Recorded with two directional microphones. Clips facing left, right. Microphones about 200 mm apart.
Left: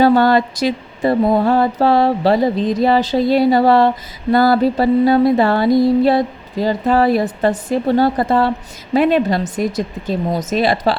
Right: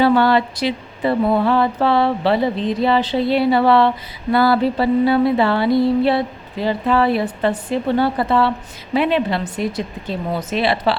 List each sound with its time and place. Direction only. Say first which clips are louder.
0.0 s mantra: left 3 dB; 40° left (ahead or behind)
7.7 s a woman's voice: left 4 dB; 40° left (ahead or behind)